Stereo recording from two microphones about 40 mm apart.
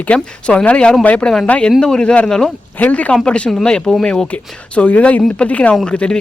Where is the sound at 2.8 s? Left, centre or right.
Left.